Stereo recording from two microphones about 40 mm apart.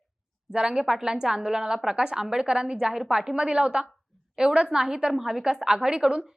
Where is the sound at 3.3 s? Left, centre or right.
Right.